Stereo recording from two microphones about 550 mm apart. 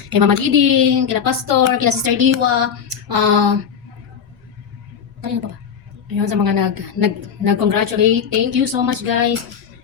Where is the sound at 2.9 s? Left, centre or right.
Right.